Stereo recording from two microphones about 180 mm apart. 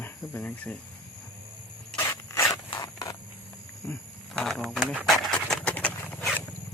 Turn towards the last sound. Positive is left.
turn(degrees=10)  # may be behind; listen again after turning